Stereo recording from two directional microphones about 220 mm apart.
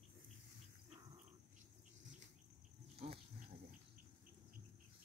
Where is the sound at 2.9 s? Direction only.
25° right (ahead or behind).